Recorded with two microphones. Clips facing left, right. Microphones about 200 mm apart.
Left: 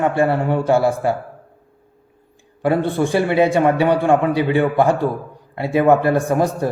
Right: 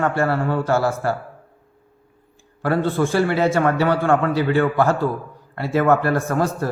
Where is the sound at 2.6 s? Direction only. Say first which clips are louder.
Left 2 dB; 15° left (ahead or behind).